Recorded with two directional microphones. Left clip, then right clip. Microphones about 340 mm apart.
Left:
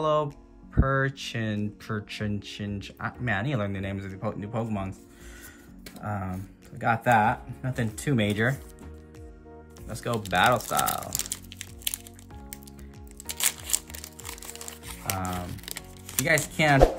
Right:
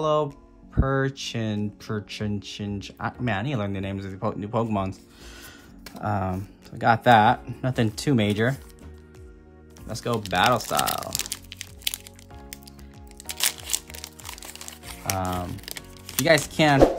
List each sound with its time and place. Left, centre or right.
0.0 s speech: centre
5.9 s speech: centre
9.8 s speech: centre
13.3 s music: centre